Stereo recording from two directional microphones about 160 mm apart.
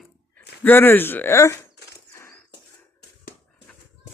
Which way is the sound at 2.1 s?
15° left (ahead or behind).